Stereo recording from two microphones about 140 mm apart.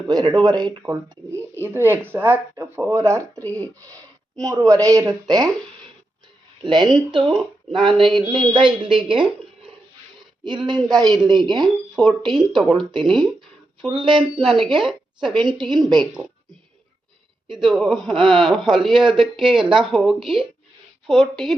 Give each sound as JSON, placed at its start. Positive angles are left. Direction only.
{"t": 0.1, "sound": "speech", "side_deg": -30}
{"t": 0.8, "sound": "speech", "side_deg": -20}
{"t": 4.4, "sound": "speech", "side_deg": -25}
{"t": 6.7, "sound": "speech", "side_deg": -35}
{"t": 10.4, "sound": "speech", "side_deg": -30}
{"t": 11.5, "sound": "a man's voice", "side_deg": 0}
{"t": 12.2, "sound": "speech", "side_deg": -35}
{"t": 12.5, "sound": "a man's voice", "side_deg": 0}
{"t": 13.8, "sound": "speech", "side_deg": -35}
{"t": 14.4, "sound": "a man's voice", "side_deg": 0}
{"t": 14.8, "sound": "a sound", "side_deg": 0}
{"t": 15.3, "sound": "speech", "side_deg": -35}
{"t": 17.6, "sound": "a man's voice", "side_deg": 0}